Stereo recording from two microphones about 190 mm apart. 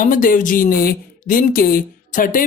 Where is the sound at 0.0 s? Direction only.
45° left (ahead or behind).